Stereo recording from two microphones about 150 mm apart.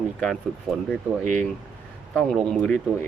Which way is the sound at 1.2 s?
55° right (ahead or behind).